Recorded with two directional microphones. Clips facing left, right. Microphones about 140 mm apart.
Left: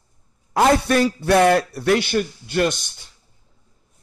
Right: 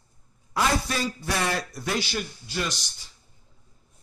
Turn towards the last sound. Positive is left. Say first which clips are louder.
# left 11 dB
turn(degrees=55)  # may be behind; listen again after turning